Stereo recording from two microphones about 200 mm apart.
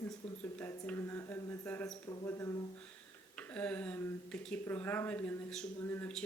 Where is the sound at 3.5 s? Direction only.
5° left (ahead or behind).